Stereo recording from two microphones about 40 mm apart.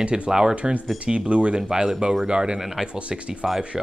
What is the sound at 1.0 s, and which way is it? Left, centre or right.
Speech, right.